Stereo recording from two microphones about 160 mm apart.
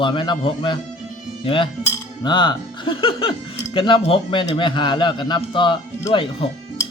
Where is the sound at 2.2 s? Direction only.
30° left (ahead or behind).